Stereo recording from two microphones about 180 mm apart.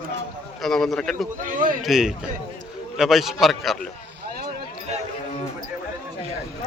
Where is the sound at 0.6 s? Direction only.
Centre (ahead or behind).